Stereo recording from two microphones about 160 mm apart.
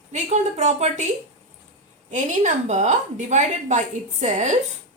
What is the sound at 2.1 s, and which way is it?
A woman's voice, 50° right (ahead or behind).